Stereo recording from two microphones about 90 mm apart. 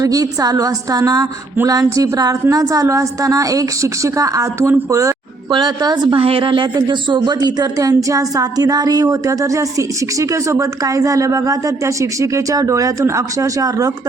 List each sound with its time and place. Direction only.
0.0 s speech: 40° right (ahead or behind)
5.5 s speech: 50° right (ahead or behind)
6.1 s speech: 90° right; by 7.3 s 55° right (ahead or behind)
7.3 s speech: 40° right (ahead or behind)